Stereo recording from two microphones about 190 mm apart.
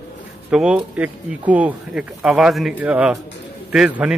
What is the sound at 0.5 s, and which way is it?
A man's voice, 5° right (ahead or behind).